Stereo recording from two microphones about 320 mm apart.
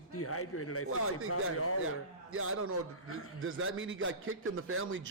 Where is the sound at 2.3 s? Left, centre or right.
Right.